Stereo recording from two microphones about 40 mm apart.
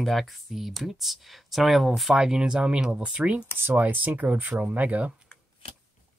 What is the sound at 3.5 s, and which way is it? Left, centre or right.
Speech, right.